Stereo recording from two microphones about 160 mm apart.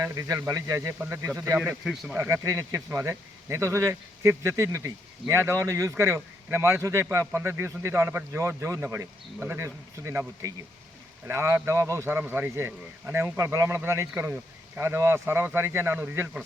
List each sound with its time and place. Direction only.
0.0 s speech: 20° right (ahead or behind)
1.8 s speech: centre (ahead or behind)
2.1 s speech: 20° right (ahead or behind)